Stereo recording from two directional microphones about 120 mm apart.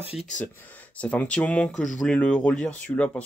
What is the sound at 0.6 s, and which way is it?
Speech, 10° left (ahead or behind).